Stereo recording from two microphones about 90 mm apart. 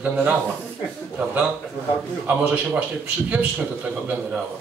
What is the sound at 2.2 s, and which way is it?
Speech, 15° right (ahead or behind).